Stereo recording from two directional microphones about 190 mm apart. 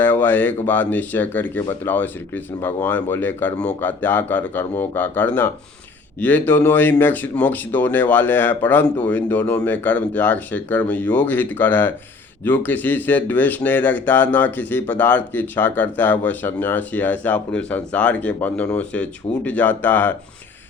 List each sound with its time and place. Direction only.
0.0 s speech: 10° left (ahead or behind)